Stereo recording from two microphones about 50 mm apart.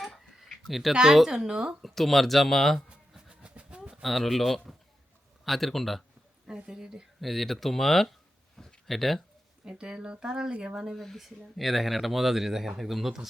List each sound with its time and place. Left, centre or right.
0.0 s a sound: centre
0.9 s speech: centre
1.8 s speech: centre
3.2 s train: centre
4.0 s speech: centre
6.7 s speech: centre
7.3 s speech: centre
8.5 s a sound: centre
9.6 s speech: centre
10.5 s speech: right
10.9 s speech: centre